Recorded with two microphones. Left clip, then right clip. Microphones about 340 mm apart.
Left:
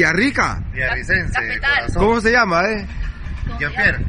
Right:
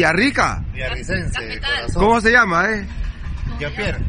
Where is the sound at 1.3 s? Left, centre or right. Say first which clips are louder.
Left 5 dB; centre.